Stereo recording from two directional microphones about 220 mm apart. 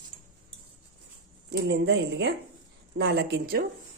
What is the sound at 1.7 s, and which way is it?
Speech, 55° right (ahead or behind).